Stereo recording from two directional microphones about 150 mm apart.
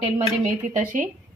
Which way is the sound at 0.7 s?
60° right (ahead or behind).